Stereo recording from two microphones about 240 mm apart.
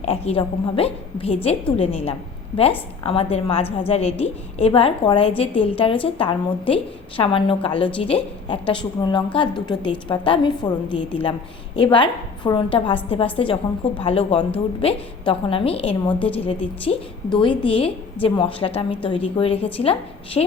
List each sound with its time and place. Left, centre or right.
0.0 s a woman's voice: left
16.0 s a woman's voice: centre
16.5 s a woman's voice: left